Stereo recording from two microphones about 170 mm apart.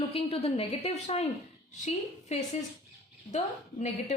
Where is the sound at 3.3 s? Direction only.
40° left (ahead or behind).